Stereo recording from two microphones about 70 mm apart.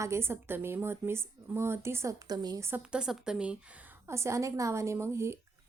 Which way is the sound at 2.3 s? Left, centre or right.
Right.